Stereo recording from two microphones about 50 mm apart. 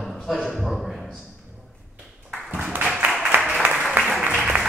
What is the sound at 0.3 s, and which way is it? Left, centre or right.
Speech, centre.